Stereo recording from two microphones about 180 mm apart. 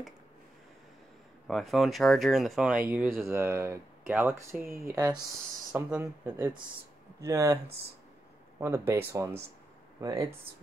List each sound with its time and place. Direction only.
1.5 s speech: centre (ahead or behind); by 7.5 s 20° right (ahead or behind)
8.5 s speech: 15° right (ahead or behind)